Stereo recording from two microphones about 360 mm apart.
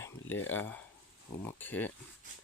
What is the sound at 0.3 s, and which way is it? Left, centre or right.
Speech, left.